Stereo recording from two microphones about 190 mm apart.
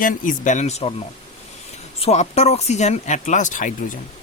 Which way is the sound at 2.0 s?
35° left (ahead or behind).